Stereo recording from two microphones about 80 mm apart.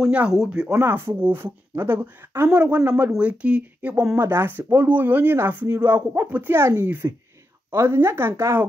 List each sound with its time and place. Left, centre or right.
0.1 s speech: centre
0.7 s speech: right
2.5 s speech: centre
4.2 s speech: right